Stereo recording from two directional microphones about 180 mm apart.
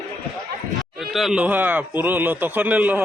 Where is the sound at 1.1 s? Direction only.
Centre (ahead or behind).